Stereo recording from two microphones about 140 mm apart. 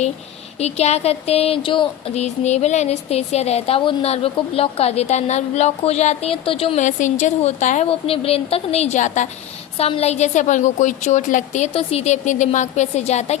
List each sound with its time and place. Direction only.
0.6 s a woman's voice: 50° left (ahead or behind)
2.1 s a woman's voice: 55° left (ahead or behind)
6.7 s a woman's voice: 60° left (ahead or behind)
9.7 s a woman's voice: 45° left (ahead or behind)